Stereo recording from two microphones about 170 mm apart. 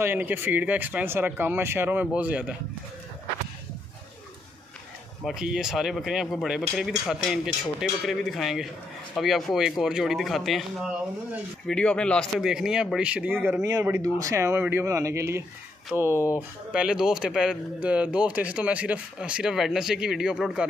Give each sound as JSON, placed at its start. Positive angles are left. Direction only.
{"t": 0.0, "sound": "speech", "side_deg": -10}
{"t": 5.2, "sound": "speech", "side_deg": -5}